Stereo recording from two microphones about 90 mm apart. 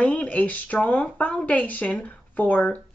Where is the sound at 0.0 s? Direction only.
15° left (ahead or behind).